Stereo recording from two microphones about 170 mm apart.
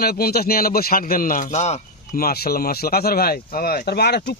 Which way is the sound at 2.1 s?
65° left (ahead or behind).